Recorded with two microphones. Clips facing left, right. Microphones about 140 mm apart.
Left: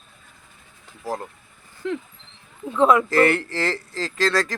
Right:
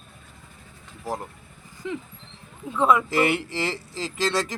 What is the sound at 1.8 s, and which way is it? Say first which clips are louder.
Speech: left 4 dB; 65° left (ahead or behind).